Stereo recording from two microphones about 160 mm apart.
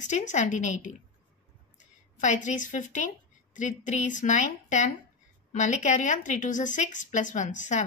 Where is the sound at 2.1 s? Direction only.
50° left (ahead or behind).